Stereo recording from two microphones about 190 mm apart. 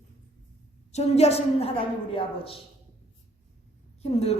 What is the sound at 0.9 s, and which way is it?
A woman's voice, 35° left (ahead or behind).